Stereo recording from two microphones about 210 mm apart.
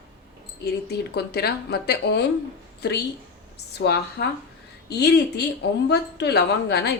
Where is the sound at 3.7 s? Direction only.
55° left (ahead or behind).